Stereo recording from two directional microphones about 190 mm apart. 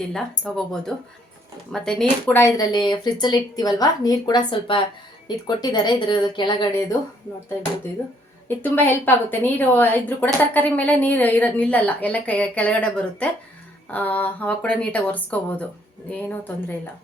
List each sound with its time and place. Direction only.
0.1 s speech: 5° left (ahead or behind); by 6.8 s 25° left (ahead or behind)
8.4 s a woman's voice: 10° left (ahead or behind)